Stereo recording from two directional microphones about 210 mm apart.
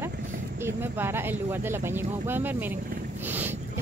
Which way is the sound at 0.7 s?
10° right (ahead or behind).